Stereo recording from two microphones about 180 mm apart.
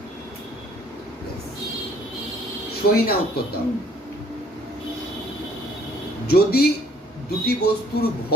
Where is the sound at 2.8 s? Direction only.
60° left (ahead or behind).